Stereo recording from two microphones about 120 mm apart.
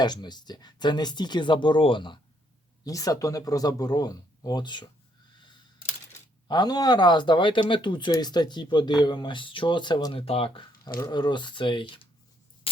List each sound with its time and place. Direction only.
0.0 s speech: 35° left (ahead or behind)
2.8 s speech: 30° left (ahead or behind)
5.3 s a sound: 40° left (ahead or behind)
6.5 s speech: 35° left (ahead or behind)